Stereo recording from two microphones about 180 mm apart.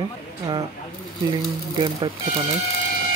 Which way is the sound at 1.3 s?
25° right (ahead or behind).